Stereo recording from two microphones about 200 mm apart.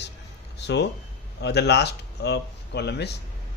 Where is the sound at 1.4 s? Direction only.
55° left (ahead or behind).